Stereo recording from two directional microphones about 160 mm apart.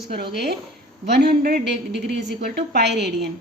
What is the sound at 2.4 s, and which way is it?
Speech, 90° right.